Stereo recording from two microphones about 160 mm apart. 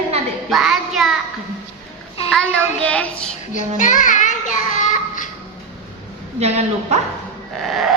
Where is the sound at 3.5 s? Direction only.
50° left (ahead or behind).